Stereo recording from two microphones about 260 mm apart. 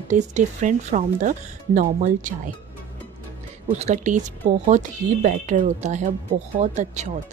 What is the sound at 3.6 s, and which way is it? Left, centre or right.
A woman's voice, right.